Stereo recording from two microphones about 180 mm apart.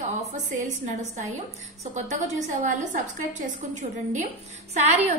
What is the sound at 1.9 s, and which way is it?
A woman's voice, 45° right (ahead or behind).